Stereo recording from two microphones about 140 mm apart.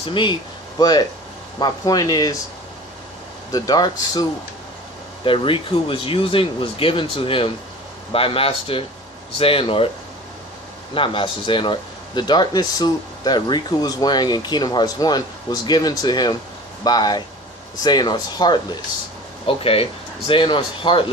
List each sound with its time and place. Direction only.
0.0 s speech: 35° left (ahead or behind)
3.5 s speech: 30° left (ahead or behind)
10.9 s speech: 40° left (ahead or behind)
19.5 s speech: 40° left (ahead or behind)